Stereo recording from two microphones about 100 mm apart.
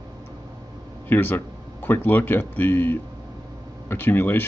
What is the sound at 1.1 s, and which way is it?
Speech, 20° left (ahead or behind).